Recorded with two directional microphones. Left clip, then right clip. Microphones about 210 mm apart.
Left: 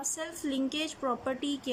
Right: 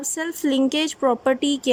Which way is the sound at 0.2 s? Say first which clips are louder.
Right 15 dB; 45° right (ahead or behind).